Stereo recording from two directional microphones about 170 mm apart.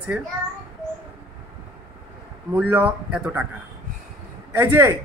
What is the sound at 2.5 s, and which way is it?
Speech, 10° right (ahead or behind).